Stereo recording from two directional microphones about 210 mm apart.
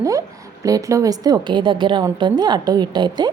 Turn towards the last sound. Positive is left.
turn(degrees=-20)  # may be behind; listen again after turning